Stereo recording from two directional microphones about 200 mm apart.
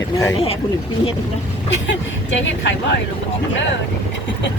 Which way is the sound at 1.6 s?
65° left (ahead or behind).